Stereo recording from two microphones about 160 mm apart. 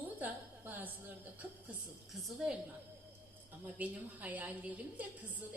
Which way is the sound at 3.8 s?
10° right (ahead or behind).